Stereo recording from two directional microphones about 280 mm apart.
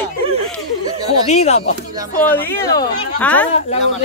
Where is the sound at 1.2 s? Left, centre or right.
Left.